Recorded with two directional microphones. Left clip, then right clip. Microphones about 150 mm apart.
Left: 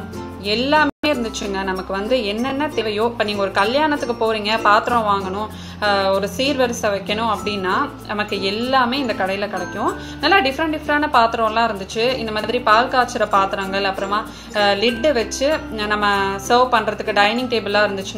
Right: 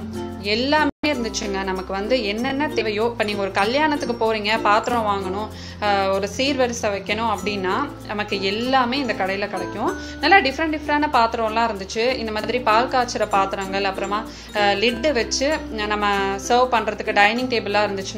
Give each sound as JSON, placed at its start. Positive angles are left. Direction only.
{"t": 0.7, "sound": "a woman's voice", "side_deg": -10}
{"t": 8.3, "sound": "a woman's voice", "side_deg": -55}
{"t": 8.5, "sound": "a woman's voice", "side_deg": -10}